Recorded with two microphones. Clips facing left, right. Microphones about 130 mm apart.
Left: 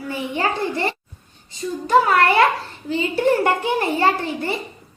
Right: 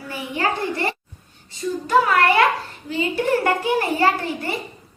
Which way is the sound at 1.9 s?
30° left (ahead or behind).